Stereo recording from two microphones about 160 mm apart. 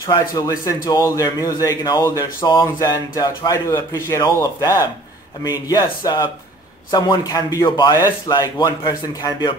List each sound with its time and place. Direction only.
0.0 s speech: 20° left (ahead or behind)